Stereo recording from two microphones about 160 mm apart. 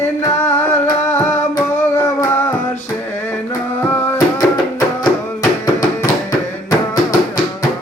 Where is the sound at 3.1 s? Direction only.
15° left (ahead or behind).